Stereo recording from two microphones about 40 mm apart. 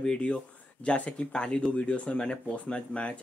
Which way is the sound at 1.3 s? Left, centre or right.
Left.